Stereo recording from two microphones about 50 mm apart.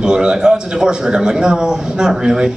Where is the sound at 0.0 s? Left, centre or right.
Centre.